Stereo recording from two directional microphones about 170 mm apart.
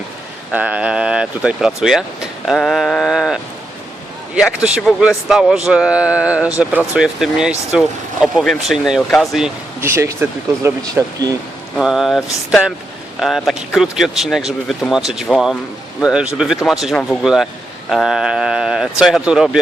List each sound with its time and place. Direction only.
0.5 s speech: 10° right (ahead or behind)
9.8 s speech: 15° right (ahead or behind)
11.8 s speech: centre (ahead or behind)